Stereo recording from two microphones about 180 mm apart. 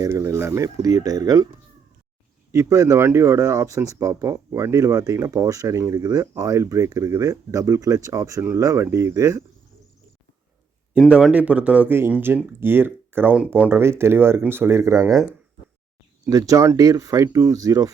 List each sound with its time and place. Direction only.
0.0 s speech: 15° right (ahead or behind)
2.5 s speech: 15° right (ahead or behind)
10.9 s speech: 5° right (ahead or behind)
16.2 s speech: 20° right (ahead or behind)